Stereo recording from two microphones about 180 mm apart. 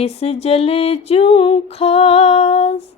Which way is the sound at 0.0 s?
35° left (ahead or behind).